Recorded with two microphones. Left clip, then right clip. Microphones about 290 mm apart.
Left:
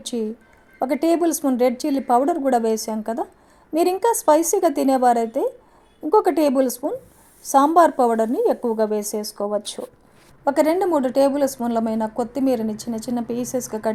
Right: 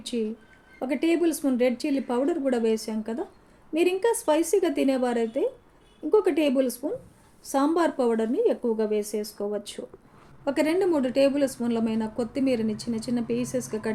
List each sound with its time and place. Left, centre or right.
0.0 s speech: left